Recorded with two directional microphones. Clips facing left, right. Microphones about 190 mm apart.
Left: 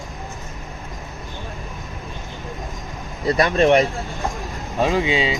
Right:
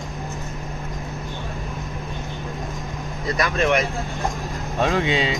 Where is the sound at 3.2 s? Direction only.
30° left (ahead or behind).